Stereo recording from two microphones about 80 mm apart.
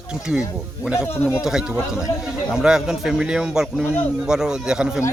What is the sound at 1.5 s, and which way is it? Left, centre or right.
Speech, centre.